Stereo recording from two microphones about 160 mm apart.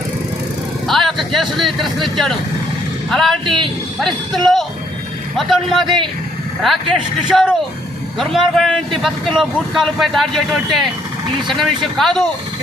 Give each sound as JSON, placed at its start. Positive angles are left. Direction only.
{"t": 0.9, "sound": "speech", "side_deg": 0}
{"t": 3.1, "sound": "a man's voice", "side_deg": 0}